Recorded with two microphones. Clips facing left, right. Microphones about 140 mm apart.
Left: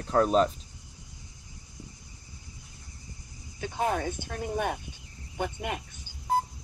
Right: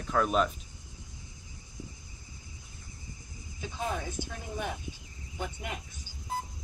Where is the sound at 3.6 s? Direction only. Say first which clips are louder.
Left 6 dB; 60° left (ahead or behind).